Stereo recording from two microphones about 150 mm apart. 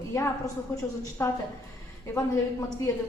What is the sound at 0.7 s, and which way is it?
A woman's voice, 20° left (ahead or behind).